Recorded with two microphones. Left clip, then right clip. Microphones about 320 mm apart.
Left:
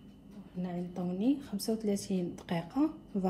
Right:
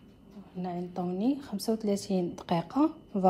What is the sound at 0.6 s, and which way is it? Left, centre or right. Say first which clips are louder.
A woman's voice: right 5 dB; right.